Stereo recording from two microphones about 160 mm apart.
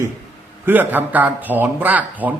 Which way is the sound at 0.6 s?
10° right (ahead or behind).